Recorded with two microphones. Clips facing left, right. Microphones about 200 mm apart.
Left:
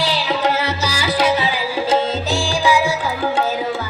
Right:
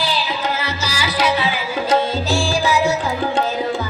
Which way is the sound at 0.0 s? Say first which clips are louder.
Left 3 dB; 75° left (ahead or behind).